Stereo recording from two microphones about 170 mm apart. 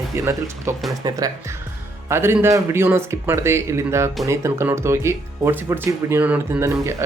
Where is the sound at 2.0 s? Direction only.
15° right (ahead or behind).